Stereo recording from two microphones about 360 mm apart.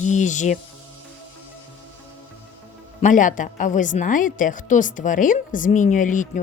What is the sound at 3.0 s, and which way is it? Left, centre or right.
A woman's voice, left.